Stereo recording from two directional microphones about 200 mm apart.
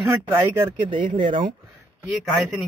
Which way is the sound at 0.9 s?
40° right (ahead or behind).